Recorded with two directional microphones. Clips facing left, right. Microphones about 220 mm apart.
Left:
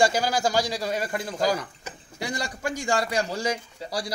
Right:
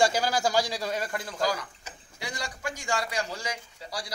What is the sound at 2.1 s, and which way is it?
A man's voice, 40° left (ahead or behind).